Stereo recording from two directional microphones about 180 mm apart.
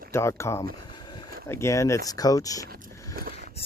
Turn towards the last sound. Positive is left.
turn(degrees=-55)  # may be behind; listen again after turning